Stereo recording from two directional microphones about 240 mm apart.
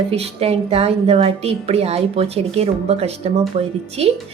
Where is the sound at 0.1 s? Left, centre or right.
Right.